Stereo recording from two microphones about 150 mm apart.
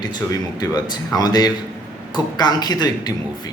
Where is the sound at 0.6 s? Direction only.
25° left (ahead or behind).